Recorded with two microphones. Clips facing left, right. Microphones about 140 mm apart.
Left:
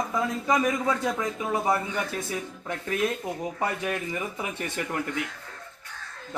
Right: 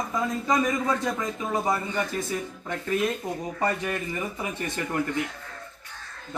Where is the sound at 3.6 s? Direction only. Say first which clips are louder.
Right 3 dB; 10° left (ahead or behind).